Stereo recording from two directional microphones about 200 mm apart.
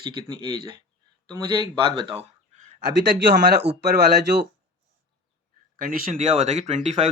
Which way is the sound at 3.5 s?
55° right (ahead or behind).